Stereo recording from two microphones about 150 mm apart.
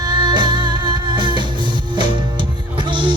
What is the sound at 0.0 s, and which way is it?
Music, 30° right (ahead or behind).